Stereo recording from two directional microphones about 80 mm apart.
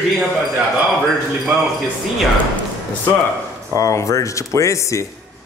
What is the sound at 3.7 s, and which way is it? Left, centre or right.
Speech, left.